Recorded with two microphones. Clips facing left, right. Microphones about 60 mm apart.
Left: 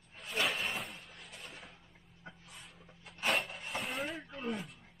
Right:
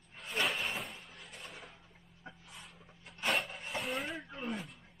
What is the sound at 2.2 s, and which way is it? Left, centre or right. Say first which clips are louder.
Vehicle: right 1 dB; centre.